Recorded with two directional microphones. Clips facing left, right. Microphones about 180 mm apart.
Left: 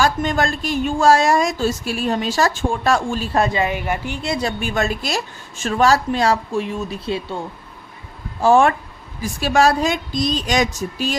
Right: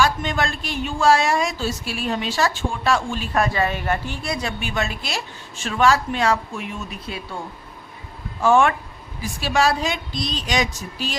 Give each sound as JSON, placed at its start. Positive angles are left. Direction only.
{"t": 0.0, "sound": "speech", "side_deg": 45}
{"t": 3.3, "sound": "a woman's voice", "side_deg": 20}
{"t": 8.4, "sound": "a woman's voice", "side_deg": 35}
{"t": 9.2, "sound": "speech", "side_deg": 45}